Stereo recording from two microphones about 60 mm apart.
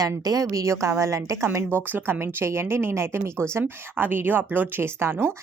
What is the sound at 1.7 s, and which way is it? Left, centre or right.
Speech, right.